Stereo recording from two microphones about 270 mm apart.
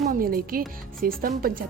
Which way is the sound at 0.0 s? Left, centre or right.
Right.